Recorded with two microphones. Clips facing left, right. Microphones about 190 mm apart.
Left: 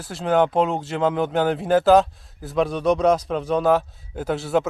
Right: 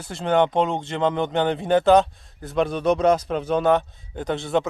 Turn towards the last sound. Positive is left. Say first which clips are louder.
# left 1 dB
turn(degrees=5)  # may be behind; listen again after turning